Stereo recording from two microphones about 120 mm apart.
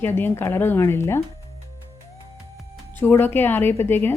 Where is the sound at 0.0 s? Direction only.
20° left (ahead or behind).